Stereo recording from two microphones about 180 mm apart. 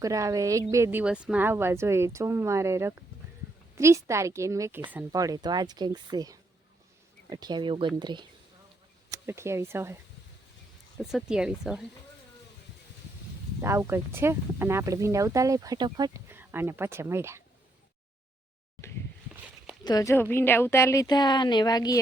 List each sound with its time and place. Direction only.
0.0 s speech: 20° right (ahead or behind)
10.9 s speech: centre (ahead or behind)
13.6 s speech: 15° right (ahead or behind)
19.8 s a woman's voice: 20° left (ahead or behind)